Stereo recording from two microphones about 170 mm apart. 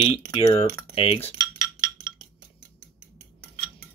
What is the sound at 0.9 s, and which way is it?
Speech, 35° left (ahead or behind).